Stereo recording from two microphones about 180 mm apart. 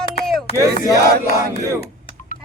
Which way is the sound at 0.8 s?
20° left (ahead or behind).